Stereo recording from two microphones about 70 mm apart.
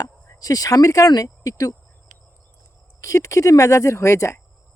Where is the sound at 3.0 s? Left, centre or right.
Left.